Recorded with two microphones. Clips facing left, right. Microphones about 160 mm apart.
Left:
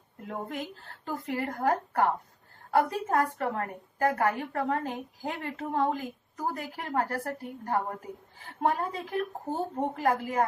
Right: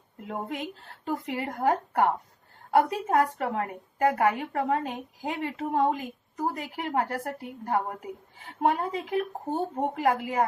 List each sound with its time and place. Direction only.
0.3 s a woman's voice: 20° right (ahead or behind)